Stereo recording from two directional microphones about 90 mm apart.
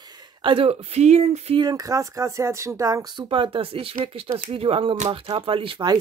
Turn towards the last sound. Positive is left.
turn(degrees=-80)